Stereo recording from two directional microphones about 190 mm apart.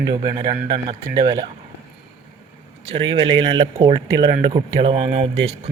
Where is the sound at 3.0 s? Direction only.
30° right (ahead or behind).